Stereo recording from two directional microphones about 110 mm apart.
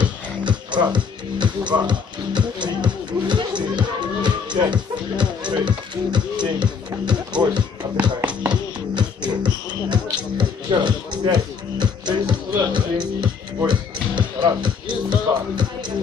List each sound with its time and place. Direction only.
0.4 s music: 45° right (ahead or behind)
1.9 s speech: 45° right (ahead or behind)
7.5 s music: 40° right (ahead or behind)
8.3 s music: 10° right (ahead or behind)
8.9 s music: 40° right (ahead or behind)